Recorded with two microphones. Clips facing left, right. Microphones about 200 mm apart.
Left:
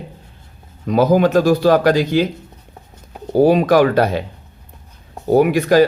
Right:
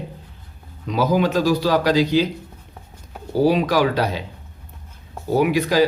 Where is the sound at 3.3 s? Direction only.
50° left (ahead or behind).